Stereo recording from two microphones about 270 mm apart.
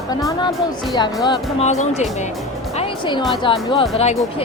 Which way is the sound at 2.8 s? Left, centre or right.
Centre.